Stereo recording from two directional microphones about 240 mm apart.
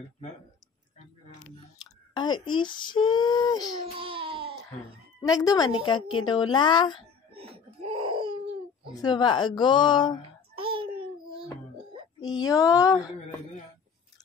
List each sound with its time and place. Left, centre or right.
1.8 s speech: centre
4.0 s a sound: right
5.2 s speech: centre
7.3 s laughter: right
8.9 s speech: centre
10.5 s a sound: right
12.2 s speech: centre